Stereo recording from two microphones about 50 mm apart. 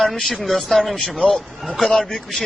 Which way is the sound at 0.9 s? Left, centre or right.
Centre.